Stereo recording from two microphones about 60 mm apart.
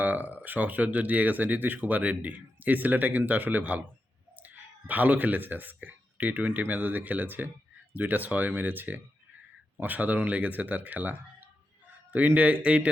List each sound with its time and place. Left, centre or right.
0.0 s speech: right